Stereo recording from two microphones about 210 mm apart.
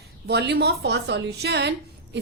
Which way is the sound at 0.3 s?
50° right (ahead or behind).